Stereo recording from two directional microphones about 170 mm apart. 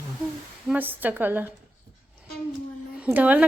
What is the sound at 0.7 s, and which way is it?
Speech, 10° right (ahead or behind).